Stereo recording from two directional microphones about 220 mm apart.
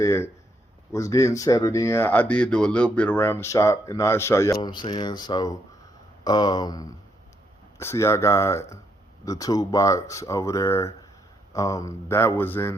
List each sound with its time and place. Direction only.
0.0 s speech: 15° left (ahead or behind)